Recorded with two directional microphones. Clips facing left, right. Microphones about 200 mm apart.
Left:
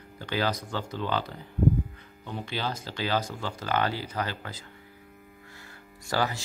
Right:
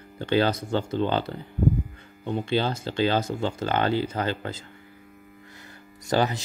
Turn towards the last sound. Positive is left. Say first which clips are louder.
# right 5 dB
turn(degrees=-20)  # may be behind; listen again after turning